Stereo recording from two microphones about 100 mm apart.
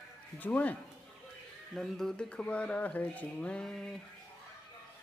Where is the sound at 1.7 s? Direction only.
5° left (ahead or behind).